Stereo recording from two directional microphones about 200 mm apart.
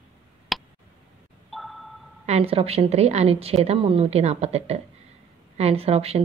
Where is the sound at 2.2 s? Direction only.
30° right (ahead or behind).